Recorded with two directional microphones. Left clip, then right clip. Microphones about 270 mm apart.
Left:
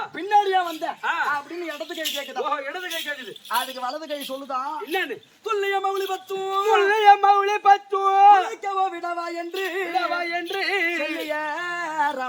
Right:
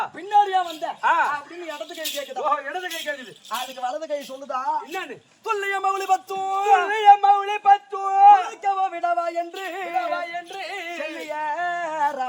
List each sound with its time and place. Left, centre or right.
0.5 s singing: centre
1.0 s speech: right
2.5 s a sound: centre
3.5 s singing: centre
5.5 s a sound: centre
6.8 s speech: left
8.6 s a sound: centre
9.9 s singing: centre
11.3 s singing: centre